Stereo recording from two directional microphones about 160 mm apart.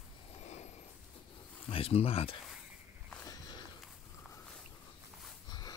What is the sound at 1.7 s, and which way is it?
Speech, 35° left (ahead or behind).